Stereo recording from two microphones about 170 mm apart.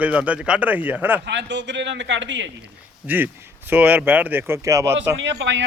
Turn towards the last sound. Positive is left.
turn(degrees=-90)